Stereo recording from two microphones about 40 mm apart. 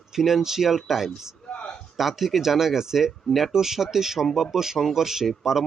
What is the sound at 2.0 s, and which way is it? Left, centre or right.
A man's voice, centre.